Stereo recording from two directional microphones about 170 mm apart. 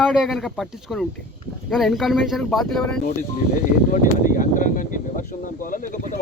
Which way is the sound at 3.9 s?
50° left (ahead or behind).